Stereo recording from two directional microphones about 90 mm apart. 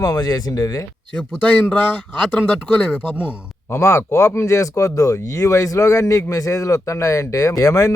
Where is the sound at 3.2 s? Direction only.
30° left (ahead or behind).